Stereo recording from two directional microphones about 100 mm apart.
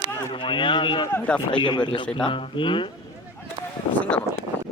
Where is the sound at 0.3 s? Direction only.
55° left (ahead or behind).